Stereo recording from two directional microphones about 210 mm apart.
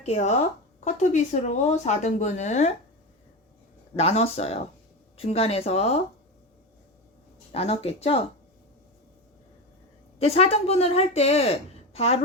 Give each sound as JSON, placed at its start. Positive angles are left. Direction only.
{"t": 0.0, "sound": "speech", "side_deg": 35}
{"t": 3.9, "sound": "a woman's voice", "side_deg": 30}
{"t": 7.5, "sound": "a woman's voice", "side_deg": 30}
{"t": 10.2, "sound": "a woman's voice", "side_deg": 30}